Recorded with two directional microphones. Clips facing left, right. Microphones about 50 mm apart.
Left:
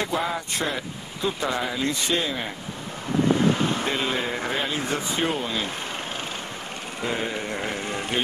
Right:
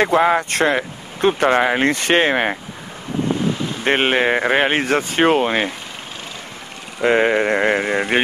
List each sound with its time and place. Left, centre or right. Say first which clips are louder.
0.0 s speech: right 11 dB; right
3.8 s speech: right 9 dB; right
7.0 s speech: right 13 dB; right